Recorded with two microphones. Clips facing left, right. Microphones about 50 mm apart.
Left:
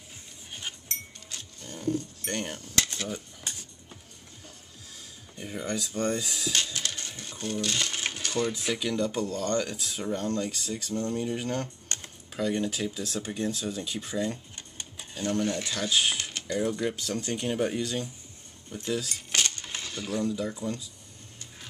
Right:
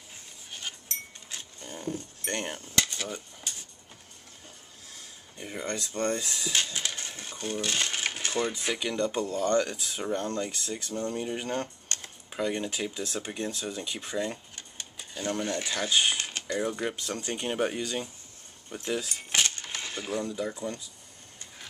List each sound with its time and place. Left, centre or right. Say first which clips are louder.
0.5 s chink: left 1 dB; centre
1.3 s music: right 1 dB; right
1.8 s cutlery: left 6 dB; centre
5.5 s speech: left 1 dB; centre
6.5 s speech: right 1 dB; right; by 9.1 s centre
9.3 s speech: right 3 dB; centre
9.6 s speech: right 2 dB; centre
16.2 s typing: right 1 dB; right
16.5 s speech: left 2 dB; centre
18.7 s keys jangling: left 1 dB; centre
19.8 s a sound: left 1 dB; right
20.2 s speech: left 2 dB; centre